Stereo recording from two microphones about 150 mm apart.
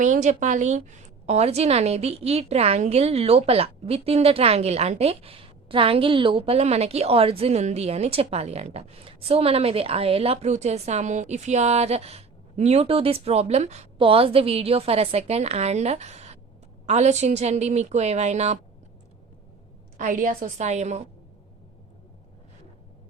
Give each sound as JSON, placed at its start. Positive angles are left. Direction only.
{"t": 0.0, "sound": "a woman's voice", "side_deg": -55}
{"t": 20.0, "sound": "a woman's voice", "side_deg": -60}